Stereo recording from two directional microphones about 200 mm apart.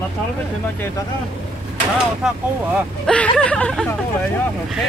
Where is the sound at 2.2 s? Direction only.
5° right (ahead or behind).